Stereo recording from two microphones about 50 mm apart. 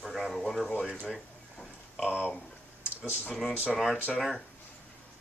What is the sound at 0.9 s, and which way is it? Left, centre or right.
Speech, centre.